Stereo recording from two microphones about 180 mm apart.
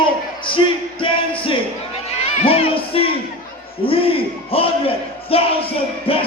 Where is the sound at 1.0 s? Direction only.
30° left (ahead or behind).